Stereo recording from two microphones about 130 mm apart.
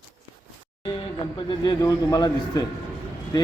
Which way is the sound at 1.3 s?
40° left (ahead or behind).